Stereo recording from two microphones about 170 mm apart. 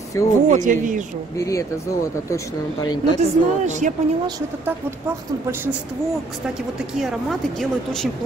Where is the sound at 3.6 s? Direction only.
45° right (ahead or behind).